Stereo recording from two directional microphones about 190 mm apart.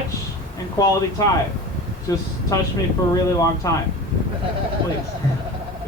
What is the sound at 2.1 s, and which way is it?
Speech, 20° left (ahead or behind).